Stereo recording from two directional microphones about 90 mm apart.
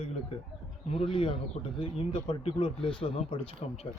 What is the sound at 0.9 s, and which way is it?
Speech, 90° left.